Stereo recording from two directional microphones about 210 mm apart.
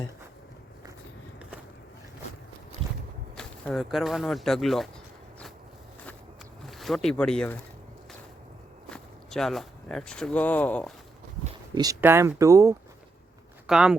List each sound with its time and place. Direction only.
2.8 s walk: 25° right (ahead or behind)
3.3 s speech: centre (ahead or behind)
6.7 s speech: centre (ahead or behind)
8.9 s speech: centre (ahead or behind)
11.7 s speech: 15° right (ahead or behind)
13.7 s speech: 5° right (ahead or behind)